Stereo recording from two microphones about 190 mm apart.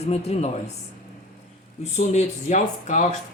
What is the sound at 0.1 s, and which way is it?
Speech, 35° left (ahead or behind).